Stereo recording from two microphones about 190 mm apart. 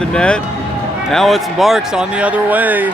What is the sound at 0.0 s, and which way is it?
Speech, 5° left (ahead or behind).